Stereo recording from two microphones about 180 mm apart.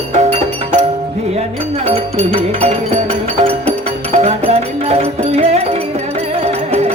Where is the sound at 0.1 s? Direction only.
35° right (ahead or behind).